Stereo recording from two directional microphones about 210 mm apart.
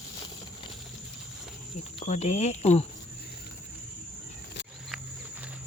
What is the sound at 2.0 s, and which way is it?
Speech, 30° left (ahead or behind).